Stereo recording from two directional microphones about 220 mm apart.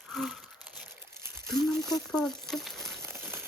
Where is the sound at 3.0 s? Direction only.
10° right (ahead or behind).